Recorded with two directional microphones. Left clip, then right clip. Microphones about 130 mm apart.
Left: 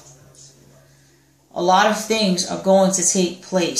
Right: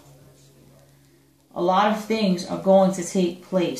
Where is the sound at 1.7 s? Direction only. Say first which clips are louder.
Left 5 dB; 25° left (ahead or behind).